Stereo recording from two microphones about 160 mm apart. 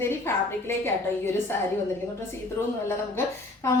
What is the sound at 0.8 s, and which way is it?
Speech, 15° left (ahead or behind).